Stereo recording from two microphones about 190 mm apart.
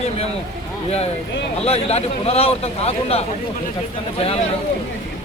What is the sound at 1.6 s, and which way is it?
Speech, 30° left (ahead or behind).